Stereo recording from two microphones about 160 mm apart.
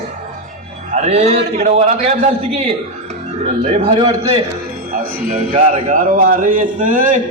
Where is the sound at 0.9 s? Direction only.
45° right (ahead or behind).